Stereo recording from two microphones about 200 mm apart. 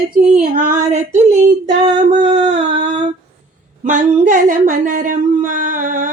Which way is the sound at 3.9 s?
40° right (ahead or behind).